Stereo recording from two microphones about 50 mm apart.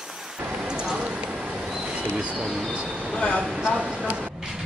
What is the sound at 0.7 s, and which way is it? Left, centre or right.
Clip-clop, centre.